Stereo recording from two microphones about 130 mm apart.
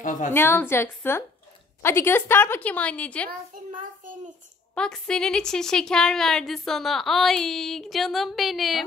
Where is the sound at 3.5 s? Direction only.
90° right.